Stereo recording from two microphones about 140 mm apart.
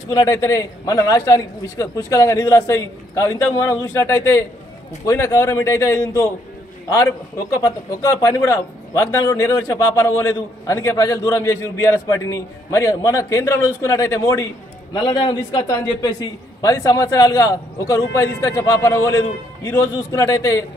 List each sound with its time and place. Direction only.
0.1 s speech: 25° left (ahead or behind)
7.3 s speech: 25° left (ahead or behind)
15.0 s speech: 35° left (ahead or behind)